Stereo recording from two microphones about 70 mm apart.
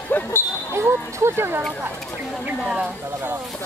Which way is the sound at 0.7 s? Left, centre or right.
Right.